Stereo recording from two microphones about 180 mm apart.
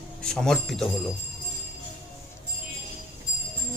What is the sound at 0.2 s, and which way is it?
Speech, 5° left (ahead or behind).